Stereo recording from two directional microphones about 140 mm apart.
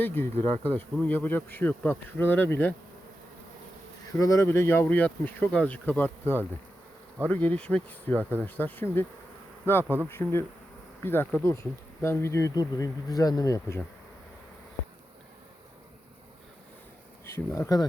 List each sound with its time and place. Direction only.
0.0 s insect: 15° left (ahead or behind)
4.2 s insect: 20° left (ahead or behind)
8.2 s speech: 15° right (ahead or behind)
8.4 s insect: 15° left (ahead or behind)
10.1 s insect: 15° left (ahead or behind)
12.0 s speech: 20° left (ahead or behind)
17.2 s speech: 20° left (ahead or behind)